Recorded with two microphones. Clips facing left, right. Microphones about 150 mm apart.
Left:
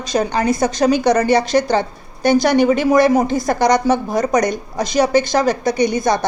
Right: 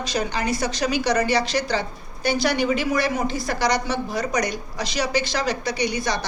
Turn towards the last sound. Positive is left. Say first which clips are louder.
# left 8 dB
turn(degrees=50)  # may be behind; listen again after turning